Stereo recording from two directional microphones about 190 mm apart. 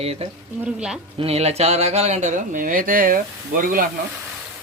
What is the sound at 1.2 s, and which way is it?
Speech, 35° right (ahead or behind).